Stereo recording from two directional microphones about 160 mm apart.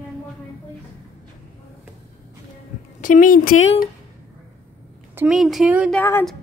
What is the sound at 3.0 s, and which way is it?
Speech, 55° left (ahead or behind).